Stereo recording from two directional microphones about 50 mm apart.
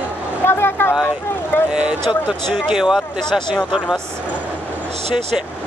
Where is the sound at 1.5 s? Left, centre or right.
Left.